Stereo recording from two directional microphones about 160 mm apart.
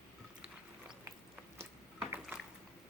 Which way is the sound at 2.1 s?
5° right (ahead or behind).